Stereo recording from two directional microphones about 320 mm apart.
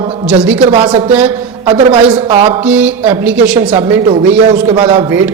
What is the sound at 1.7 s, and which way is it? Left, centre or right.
Speech, centre.